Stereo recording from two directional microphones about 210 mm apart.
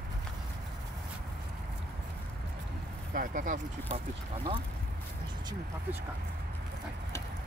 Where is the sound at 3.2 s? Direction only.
40° right (ahead or behind).